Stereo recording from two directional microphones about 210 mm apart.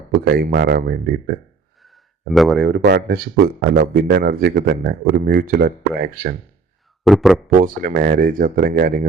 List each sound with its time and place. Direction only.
0.1 s speech: 50° right (ahead or behind)
1.8 s a sound: centre (ahead or behind)
2.6 s speech: 50° right (ahead or behind)
7.0 s speech: centre (ahead or behind)
7.5 s speech: 40° right (ahead or behind)